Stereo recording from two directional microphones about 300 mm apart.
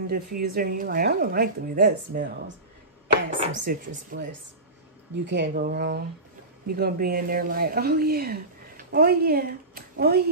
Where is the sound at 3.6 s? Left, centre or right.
Right.